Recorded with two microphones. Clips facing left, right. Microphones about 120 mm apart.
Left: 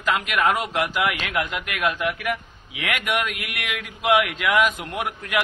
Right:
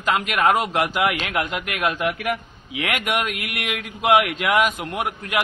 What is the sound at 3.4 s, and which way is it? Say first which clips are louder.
Mantra: right 2 dB; 45° right (ahead or behind).